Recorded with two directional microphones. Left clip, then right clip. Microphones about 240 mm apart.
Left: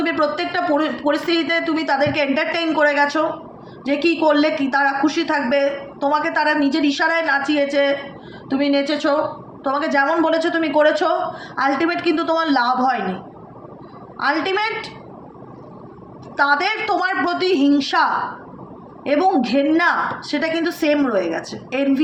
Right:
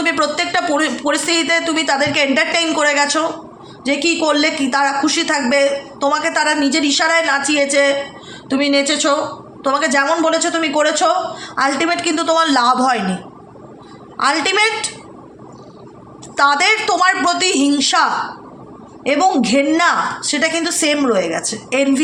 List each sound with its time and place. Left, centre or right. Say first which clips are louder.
0.0 s a man's voice: right 3 dB; right
14.2 s a man's voice: right 5 dB; right
16.4 s a man's voice: right 4 dB; right